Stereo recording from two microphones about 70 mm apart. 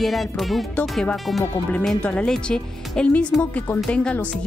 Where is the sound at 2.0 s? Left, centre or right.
Centre.